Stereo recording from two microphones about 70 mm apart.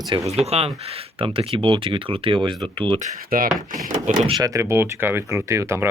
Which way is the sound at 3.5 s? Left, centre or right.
Centre.